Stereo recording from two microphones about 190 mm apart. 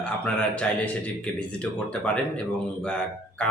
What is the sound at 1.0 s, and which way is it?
A man's voice, 5° left (ahead or behind).